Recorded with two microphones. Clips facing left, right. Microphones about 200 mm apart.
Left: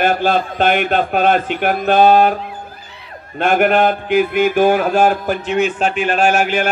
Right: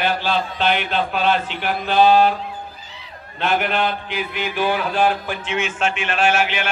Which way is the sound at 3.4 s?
50° left (ahead or behind).